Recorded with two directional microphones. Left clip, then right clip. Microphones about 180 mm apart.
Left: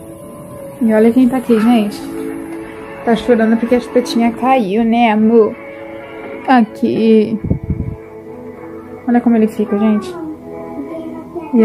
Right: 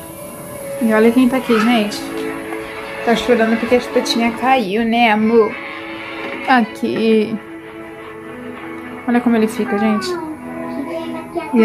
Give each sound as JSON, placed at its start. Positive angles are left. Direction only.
{"t": 0.8, "sound": "a woman's voice", "side_deg": 20}
{"t": 3.1, "sound": "a woman's voice", "side_deg": 25}
{"t": 9.1, "sound": "speech", "side_deg": 15}